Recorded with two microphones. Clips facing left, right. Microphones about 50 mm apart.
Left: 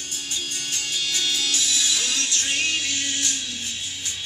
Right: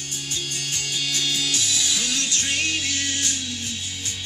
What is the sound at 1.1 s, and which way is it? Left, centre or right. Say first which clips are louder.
Music: even; centre.